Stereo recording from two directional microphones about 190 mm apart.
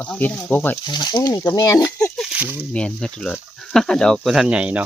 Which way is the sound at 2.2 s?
5° right (ahead or behind).